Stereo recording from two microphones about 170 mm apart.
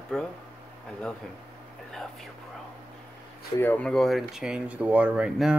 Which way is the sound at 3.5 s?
10° left (ahead or behind).